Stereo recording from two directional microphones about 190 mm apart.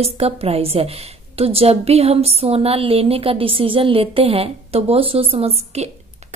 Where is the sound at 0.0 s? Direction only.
30° right (ahead or behind).